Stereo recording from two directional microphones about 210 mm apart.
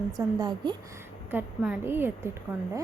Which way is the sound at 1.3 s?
5° right (ahead or behind).